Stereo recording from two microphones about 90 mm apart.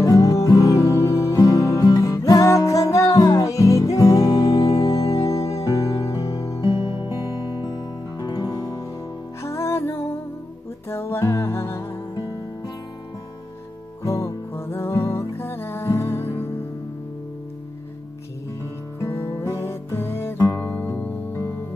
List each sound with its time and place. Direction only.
0.0 s music: 40° left (ahead or behind)
6.6 s music: 60° left (ahead or behind)
7.2 s music: 45° left (ahead or behind)
9.4 s music: 30° left (ahead or behind)
14.0 s music: 30° left (ahead or behind)
18.9 s music: 35° left (ahead or behind)